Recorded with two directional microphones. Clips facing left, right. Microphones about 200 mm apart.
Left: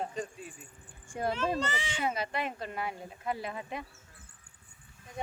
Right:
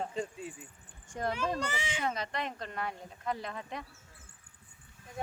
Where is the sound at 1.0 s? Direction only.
10° left (ahead or behind).